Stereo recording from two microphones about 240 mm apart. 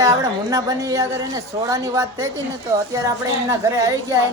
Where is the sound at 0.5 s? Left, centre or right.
Centre.